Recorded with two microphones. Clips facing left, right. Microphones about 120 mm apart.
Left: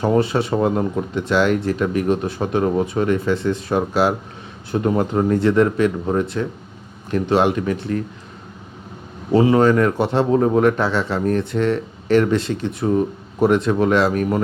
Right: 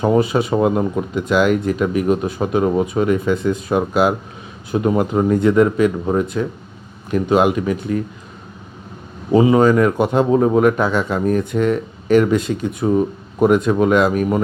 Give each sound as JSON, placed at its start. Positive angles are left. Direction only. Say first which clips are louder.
{"t": 0.0, "sound": "speech", "louder": "right 2 dB", "side_deg": -10}
{"t": 9.3, "sound": "speech", "louder": "right 2 dB", "side_deg": -10}